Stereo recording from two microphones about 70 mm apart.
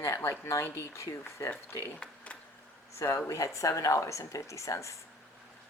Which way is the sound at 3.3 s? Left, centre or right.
Left.